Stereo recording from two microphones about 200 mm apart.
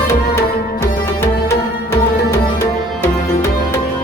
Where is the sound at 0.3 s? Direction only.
15° left (ahead or behind).